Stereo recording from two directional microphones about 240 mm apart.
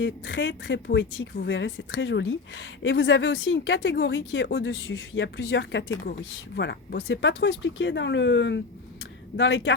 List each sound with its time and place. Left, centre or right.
0.0 s a woman's voice: left